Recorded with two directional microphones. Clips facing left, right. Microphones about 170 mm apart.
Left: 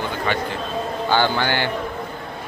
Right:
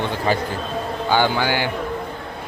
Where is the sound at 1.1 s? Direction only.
10° right (ahead or behind).